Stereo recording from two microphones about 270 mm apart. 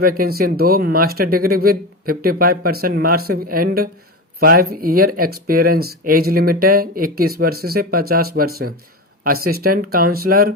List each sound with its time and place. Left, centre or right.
0.0 s speech: right